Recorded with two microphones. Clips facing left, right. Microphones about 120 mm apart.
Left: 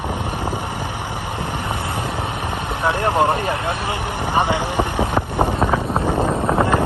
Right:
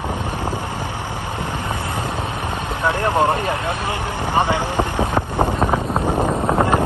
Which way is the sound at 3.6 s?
20° left (ahead or behind).